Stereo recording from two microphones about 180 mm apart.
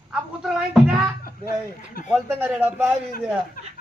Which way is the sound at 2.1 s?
10° right (ahead or behind).